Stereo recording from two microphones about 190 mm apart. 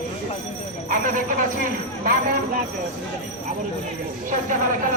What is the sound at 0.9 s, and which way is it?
Speech, 45° right (ahead or behind).